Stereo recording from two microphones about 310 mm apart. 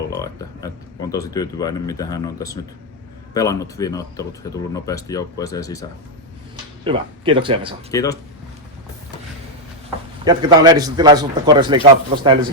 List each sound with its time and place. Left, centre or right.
0.1 s speech: centre
6.8 s a man's voice: centre
7.9 s speech: centre
10.2 s a man's voice: centre